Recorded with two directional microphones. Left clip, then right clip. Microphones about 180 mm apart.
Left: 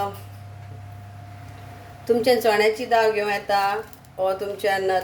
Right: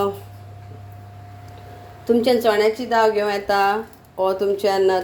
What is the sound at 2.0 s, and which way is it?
Speech, 20° right (ahead or behind).